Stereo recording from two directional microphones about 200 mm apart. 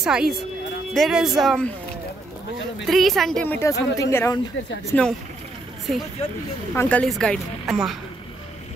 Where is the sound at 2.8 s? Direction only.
Centre (ahead or behind).